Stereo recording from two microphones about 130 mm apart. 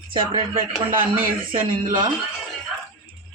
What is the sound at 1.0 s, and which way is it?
Speech, 90° right.